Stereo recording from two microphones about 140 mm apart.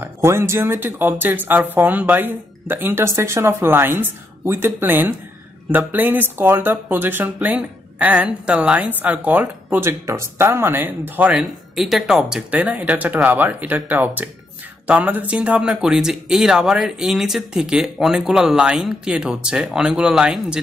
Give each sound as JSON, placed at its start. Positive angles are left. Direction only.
{"t": 0.0, "sound": "speech", "side_deg": -20}